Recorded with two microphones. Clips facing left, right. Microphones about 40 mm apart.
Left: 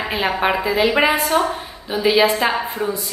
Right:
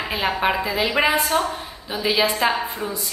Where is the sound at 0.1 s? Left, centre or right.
Centre.